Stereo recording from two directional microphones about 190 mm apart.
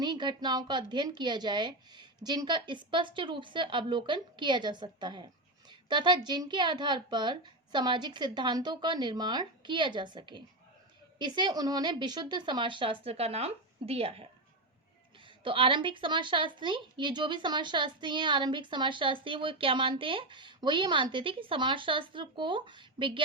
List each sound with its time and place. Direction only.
0.0 s a woman's voice: 25° right (ahead or behind)
15.4 s a woman's voice: 25° right (ahead or behind)